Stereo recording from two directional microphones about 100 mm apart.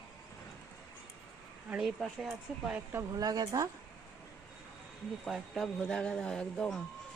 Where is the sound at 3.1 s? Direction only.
40° right (ahead or behind).